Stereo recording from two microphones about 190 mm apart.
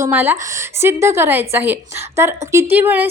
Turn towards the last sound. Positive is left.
turn(degrees=-10)  # may be behind; listen again after turning